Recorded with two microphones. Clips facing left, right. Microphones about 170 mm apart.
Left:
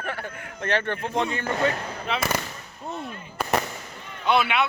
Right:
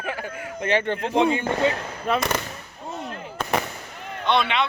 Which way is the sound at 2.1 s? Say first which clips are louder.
Right 5 dB; 45° right (ahead or behind).